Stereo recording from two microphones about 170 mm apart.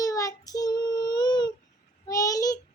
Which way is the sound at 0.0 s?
20° left (ahead or behind).